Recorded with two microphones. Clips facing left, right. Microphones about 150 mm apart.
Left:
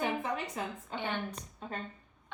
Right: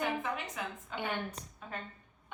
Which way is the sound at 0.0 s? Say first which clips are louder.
Left 1 dB; 35° left (ahead or behind).